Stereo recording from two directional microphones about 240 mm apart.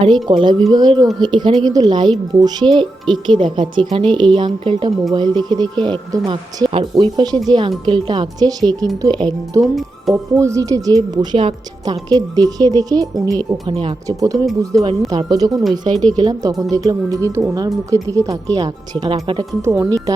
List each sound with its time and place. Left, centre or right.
0.3 s a woman's voice: centre